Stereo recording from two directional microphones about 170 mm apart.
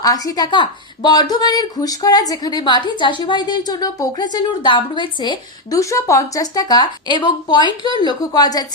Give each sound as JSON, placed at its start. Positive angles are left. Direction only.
{"t": 0.0, "sound": "a woman's voice", "side_deg": 20}